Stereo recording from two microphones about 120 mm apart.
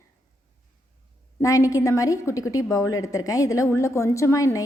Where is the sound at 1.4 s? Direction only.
25° left (ahead or behind).